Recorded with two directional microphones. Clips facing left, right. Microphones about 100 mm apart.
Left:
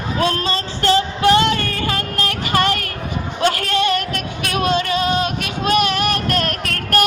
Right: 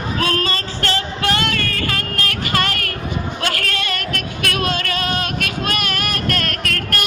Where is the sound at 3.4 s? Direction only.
20° left (ahead or behind).